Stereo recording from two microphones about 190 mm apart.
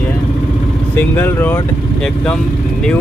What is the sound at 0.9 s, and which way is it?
Speech, 10° left (ahead or behind).